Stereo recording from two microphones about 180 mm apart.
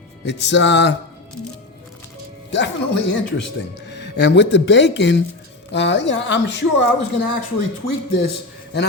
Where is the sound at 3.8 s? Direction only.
75° left (ahead or behind).